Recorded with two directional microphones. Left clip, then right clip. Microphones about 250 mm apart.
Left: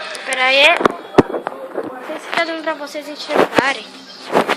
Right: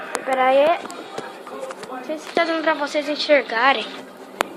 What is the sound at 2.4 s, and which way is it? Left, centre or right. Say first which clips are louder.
Speech: right 1 dB; centre.